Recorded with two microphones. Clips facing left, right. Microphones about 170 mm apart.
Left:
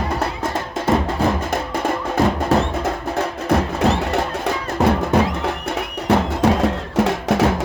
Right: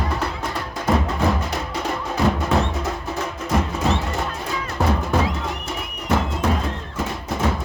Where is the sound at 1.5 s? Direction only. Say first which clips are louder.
Left 4 dB; 50° left (ahead or behind).